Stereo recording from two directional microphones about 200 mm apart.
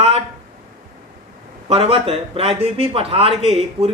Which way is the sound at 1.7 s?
30° right (ahead or behind).